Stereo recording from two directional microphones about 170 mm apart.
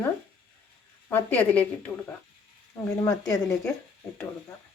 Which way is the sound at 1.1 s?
10° left (ahead or behind).